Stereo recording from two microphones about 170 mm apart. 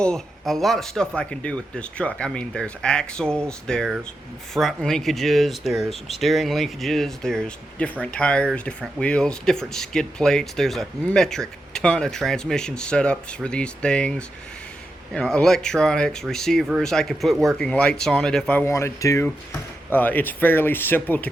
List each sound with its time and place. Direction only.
0.0 s speech: 5° left (ahead or behind)